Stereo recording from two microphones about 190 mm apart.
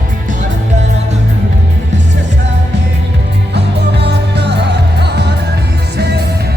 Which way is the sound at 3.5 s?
60° right (ahead or behind).